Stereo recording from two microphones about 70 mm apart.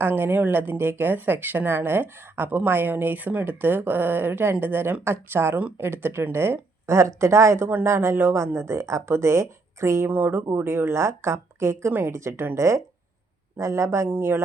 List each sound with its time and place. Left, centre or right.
0.0 s speech: right
10.1 s speech: right
11.9 s speech: right